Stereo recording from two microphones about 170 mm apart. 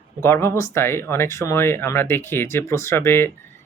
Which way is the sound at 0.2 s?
15° left (ahead or behind).